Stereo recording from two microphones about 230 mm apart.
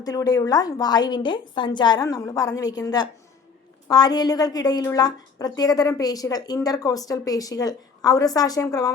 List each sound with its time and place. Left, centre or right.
0.0 s a woman's voice: centre